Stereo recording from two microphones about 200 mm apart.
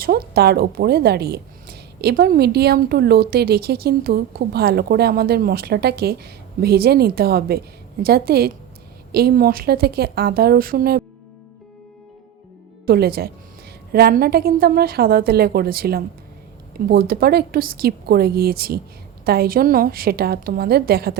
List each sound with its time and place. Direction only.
0.0 s a woman's voice: 50° right (ahead or behind)
12.9 s a woman's voice: 50° right (ahead or behind)